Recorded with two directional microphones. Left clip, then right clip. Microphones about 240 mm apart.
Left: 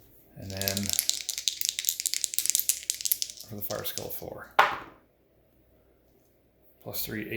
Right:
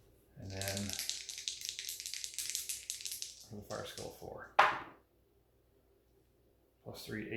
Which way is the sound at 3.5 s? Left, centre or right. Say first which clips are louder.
Left 8 dB; left.